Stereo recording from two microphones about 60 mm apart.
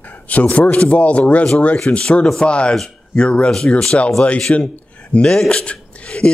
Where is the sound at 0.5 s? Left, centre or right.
Left.